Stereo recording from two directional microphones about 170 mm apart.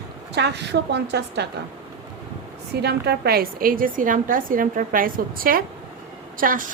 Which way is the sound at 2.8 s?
70° right (ahead or behind).